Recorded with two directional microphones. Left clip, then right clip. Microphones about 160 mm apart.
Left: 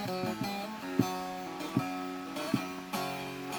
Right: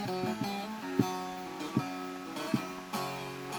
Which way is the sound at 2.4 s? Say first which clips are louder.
Even; 55° left (ahead or behind).